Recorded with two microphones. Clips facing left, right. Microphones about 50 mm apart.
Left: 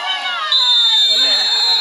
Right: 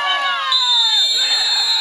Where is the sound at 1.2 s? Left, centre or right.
Centre.